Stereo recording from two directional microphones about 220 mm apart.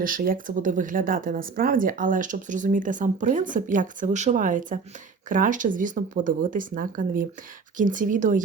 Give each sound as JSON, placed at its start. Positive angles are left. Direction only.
{"t": 0.0, "sound": "speech", "side_deg": -40}